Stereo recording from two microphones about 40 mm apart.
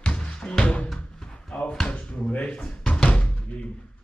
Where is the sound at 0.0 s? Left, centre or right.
Left.